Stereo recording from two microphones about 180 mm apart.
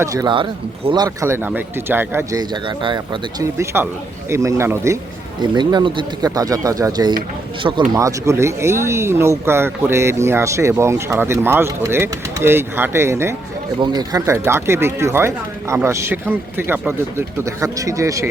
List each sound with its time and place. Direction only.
0.0 s speech: 20° right (ahead or behind)
5.4 s speech: 25° right (ahead or behind)